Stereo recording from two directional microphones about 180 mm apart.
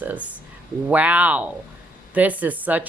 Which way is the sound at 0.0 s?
10° right (ahead or behind).